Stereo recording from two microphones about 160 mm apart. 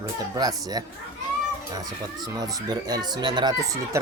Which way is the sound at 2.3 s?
25° right (ahead or behind).